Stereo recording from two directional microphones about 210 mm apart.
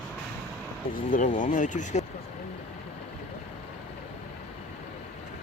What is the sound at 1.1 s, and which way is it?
Speech, 40° left (ahead or behind).